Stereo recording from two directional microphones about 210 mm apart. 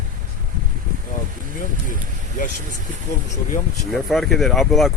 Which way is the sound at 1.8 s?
40° left (ahead or behind).